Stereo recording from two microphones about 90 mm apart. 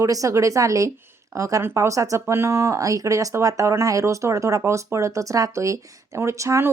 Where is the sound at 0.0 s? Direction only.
40° right (ahead or behind).